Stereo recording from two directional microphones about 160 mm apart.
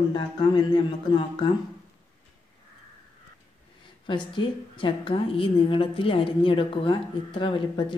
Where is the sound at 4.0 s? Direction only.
30° left (ahead or behind).